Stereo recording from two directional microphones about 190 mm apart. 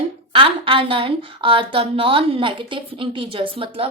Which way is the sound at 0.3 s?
30° right (ahead or behind).